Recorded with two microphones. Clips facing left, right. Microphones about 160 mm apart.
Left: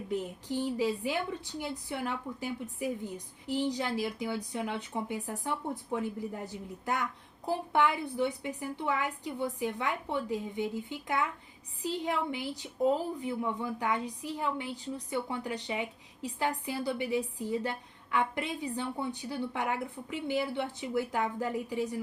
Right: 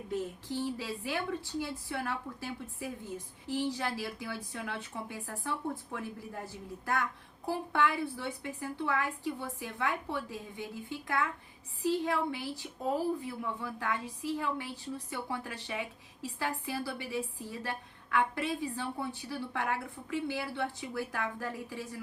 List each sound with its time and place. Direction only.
0.1 s a woman's voice: 15° left (ahead or behind)